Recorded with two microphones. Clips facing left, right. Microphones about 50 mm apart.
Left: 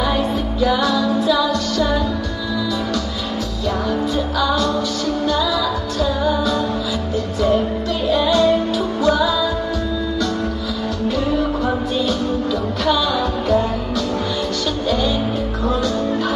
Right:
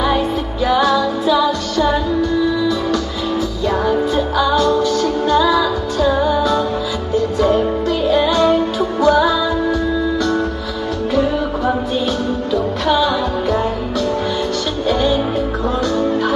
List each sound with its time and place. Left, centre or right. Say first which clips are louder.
0.6 s music: right 3 dB; right
3.8 s music: right 4 dB; right
8.1 s music: right 1 dB; right
14.9 s music: right 4 dB; right